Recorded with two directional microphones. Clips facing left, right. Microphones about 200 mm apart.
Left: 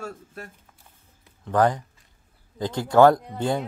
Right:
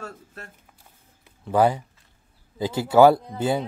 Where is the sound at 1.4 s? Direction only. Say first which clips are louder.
Right 1 dB; 10° right (ahead or behind).